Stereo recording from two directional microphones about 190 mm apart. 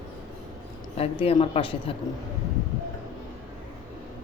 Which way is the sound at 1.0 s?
30° left (ahead or behind).